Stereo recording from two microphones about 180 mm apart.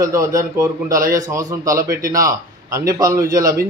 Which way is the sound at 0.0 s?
20° right (ahead or behind).